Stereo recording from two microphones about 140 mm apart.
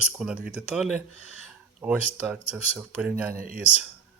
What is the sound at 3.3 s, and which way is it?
Speech, 75° right (ahead or behind).